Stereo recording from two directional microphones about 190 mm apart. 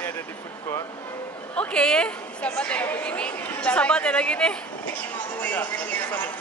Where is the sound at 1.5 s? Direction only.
5° left (ahead or behind).